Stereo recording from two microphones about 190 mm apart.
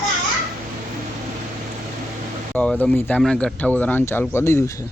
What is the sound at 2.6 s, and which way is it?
Speech, 5° left (ahead or behind).